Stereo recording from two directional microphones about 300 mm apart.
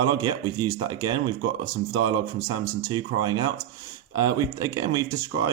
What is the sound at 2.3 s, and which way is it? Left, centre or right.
Speech, right.